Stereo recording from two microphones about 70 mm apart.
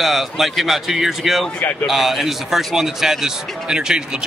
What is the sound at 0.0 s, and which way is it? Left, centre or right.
Speech, centre.